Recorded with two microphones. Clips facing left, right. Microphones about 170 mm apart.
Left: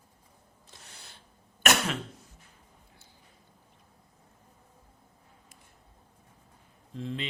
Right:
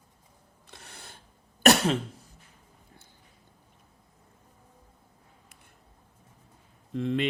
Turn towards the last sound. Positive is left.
turn(degrees=-65)  # may be behind; listen again after turning